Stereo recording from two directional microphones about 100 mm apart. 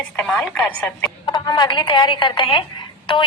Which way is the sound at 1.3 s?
50° left (ahead or behind).